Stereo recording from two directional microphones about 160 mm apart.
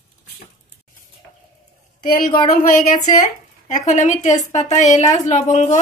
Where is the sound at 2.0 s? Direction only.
65° left (ahead or behind).